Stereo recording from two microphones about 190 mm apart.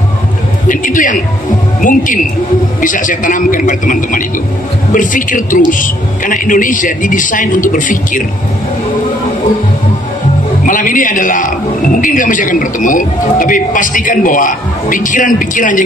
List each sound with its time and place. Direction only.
0.7 s a man's voice: 45° left (ahead or behind)
10.7 s a man's voice: 45° left (ahead or behind)